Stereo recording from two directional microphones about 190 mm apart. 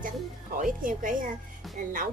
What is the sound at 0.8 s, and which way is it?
Speech, 45° right (ahead or behind).